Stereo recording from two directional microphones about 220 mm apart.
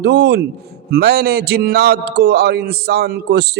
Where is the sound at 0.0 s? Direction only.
50° right (ahead or behind).